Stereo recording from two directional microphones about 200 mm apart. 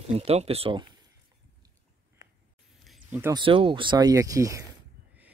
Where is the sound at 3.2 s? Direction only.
15° right (ahead or behind).